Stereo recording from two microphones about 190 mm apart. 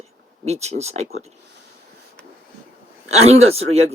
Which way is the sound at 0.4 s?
35° right (ahead or behind).